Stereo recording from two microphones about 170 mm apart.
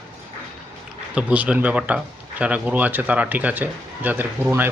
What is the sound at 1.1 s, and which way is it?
Speech, 5° right (ahead or behind).